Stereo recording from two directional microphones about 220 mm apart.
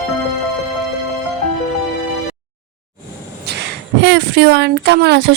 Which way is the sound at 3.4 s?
50° right (ahead or behind).